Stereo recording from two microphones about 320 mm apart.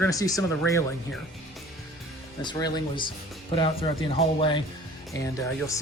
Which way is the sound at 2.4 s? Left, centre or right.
Centre.